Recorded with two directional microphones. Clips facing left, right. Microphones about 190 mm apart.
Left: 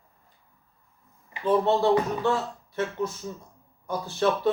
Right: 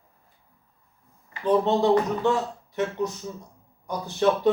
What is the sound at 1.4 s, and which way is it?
Speech, 15° right (ahead or behind).